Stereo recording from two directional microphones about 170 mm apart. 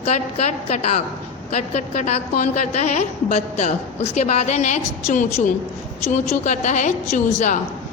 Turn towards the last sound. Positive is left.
turn(degrees=45)  # may be behind; listen again after turning